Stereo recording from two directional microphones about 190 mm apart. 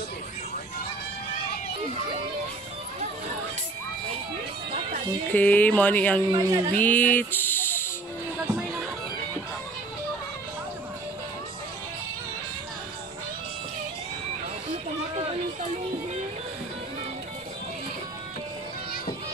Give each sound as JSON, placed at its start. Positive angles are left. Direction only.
{"t": 5.3, "sound": "music", "side_deg": 10}
{"t": 6.3, "sound": "speech", "side_deg": -20}
{"t": 6.7, "sound": "a sound", "side_deg": 10}